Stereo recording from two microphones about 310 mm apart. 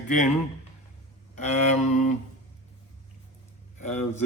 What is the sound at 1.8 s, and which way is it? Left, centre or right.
Speech, left.